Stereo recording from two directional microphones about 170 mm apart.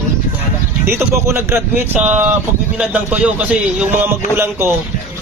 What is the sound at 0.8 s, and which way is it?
Speech, 15° right (ahead or behind).